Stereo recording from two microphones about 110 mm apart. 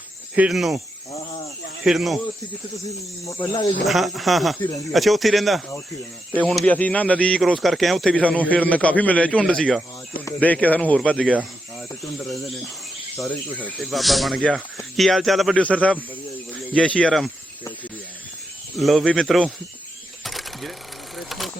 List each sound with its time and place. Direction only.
0.3 s speech: 5° right (ahead or behind)
1.8 s speech: centre (ahead or behind)
3.2 s speech: 40° left (ahead or behind)
3.8 s a man's voice: centre (ahead or behind)
13.2 s a man's voice: 15° left (ahead or behind)
13.7 s speech: centre (ahead or behind)
15.5 s a man's voice: 10° left (ahead or behind)
18.8 s speech: centre (ahead or behind)
20.2 s a sound: centre (ahead or behind)